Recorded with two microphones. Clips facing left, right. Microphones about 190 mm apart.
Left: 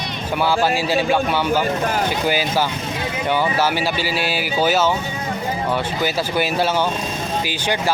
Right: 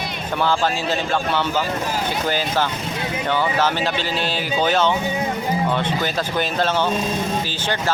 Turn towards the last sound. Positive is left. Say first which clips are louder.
# left 2 dB
turn(degrees=10)  # may be behind; listen again after turning